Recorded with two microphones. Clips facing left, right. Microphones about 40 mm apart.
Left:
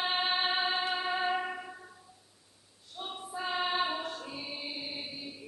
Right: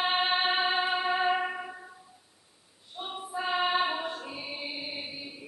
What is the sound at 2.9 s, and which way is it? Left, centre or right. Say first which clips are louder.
Choir: right 4 dB; centre.